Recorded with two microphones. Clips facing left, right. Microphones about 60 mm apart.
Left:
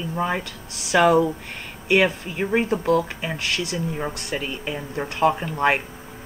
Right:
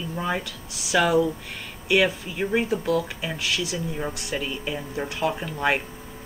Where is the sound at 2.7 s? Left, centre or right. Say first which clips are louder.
Left 3 dB; left.